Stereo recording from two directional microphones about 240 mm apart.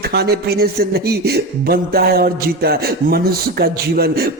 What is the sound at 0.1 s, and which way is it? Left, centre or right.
Speech, right.